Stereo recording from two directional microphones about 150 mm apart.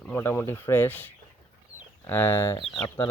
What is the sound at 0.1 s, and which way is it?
Speech, 15° left (ahead or behind).